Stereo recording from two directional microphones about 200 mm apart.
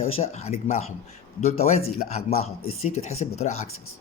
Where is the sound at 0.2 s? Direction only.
30° left (ahead or behind).